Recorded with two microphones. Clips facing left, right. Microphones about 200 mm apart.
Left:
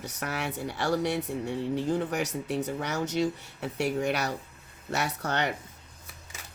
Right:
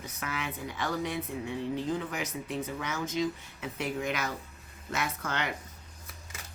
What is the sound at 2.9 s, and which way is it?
Speech, 75° left (ahead or behind).